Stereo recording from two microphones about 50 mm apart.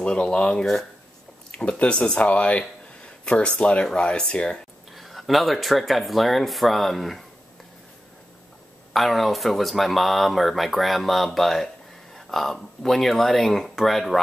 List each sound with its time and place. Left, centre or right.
0.0 s speech: left
4.9 s speech: centre
8.9 s speech: centre